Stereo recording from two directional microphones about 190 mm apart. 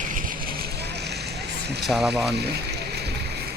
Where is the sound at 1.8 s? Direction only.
Centre (ahead or behind).